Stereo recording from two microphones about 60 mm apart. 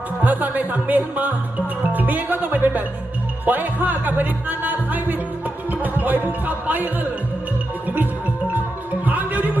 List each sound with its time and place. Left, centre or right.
0.2 s music: right
9.0 s music: right